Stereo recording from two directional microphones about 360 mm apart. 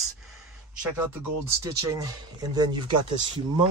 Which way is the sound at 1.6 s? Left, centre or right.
Centre.